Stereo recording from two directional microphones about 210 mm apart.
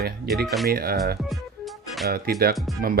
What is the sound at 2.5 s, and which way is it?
Speech, centre (ahead or behind).